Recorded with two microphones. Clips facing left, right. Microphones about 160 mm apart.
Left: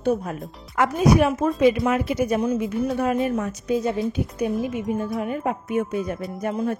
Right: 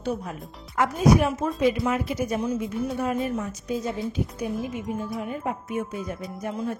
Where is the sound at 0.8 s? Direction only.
70° left (ahead or behind).